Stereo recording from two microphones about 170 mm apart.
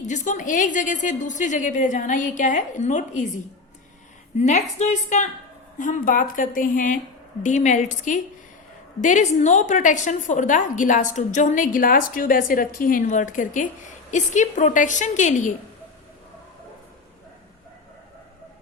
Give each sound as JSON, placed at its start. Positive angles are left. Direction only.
{"t": 0.1, "sound": "a woman's voice", "side_deg": 50}
{"t": 4.4, "sound": "a woman's voice", "side_deg": 40}